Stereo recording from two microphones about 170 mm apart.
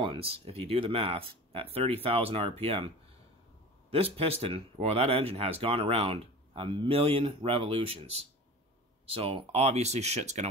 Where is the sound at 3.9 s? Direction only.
35° right (ahead or behind).